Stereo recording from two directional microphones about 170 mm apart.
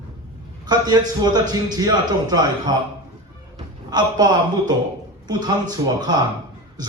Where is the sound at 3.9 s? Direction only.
25° right (ahead or behind).